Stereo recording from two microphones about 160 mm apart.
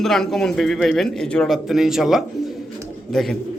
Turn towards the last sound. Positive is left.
turn(degrees=5)  # may be behind; listen again after turning